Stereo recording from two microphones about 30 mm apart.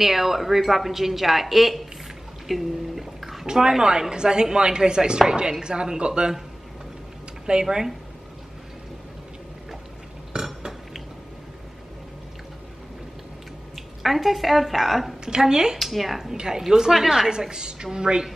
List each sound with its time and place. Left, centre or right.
0.0 s a woman's voice: centre
2.4 s a sound: centre
3.5 s a woman's voice: centre
4.1 s a woman's voice: right
7.6 s a woman's voice: centre
10.3 s burping: right
13.7 s speech: centre
15.4 s a woman's voice: centre
15.8 s speech: centre
16.4 s a woman's voice: centre